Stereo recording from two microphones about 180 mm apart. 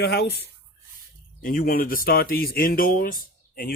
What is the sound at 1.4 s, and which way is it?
Speech, 50° left (ahead or behind).